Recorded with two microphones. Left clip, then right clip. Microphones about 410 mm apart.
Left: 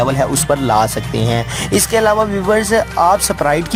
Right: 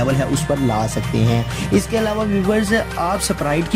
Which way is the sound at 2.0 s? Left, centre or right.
Centre.